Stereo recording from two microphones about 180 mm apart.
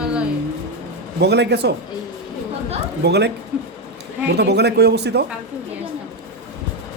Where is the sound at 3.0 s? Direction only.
70° right (ahead or behind).